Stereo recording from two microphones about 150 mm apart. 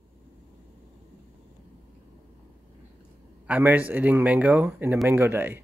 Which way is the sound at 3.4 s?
10° right (ahead or behind).